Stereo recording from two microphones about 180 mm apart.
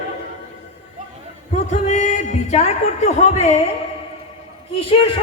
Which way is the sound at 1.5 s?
40° left (ahead or behind).